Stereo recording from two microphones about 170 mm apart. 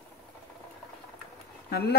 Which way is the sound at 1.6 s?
70° left (ahead or behind).